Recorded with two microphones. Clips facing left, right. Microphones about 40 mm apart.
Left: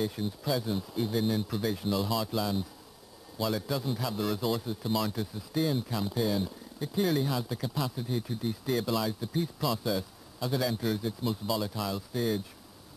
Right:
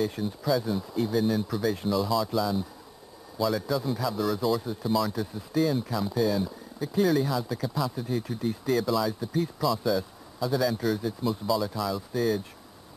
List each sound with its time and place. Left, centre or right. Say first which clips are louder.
0.2 s speech: right 4 dB; centre